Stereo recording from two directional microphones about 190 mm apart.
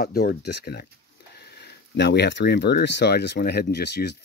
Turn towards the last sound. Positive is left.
turn(degrees=60)  # may be behind; listen again after turning